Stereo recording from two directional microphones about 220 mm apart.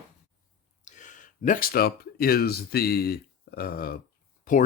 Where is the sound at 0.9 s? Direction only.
35° left (ahead or behind).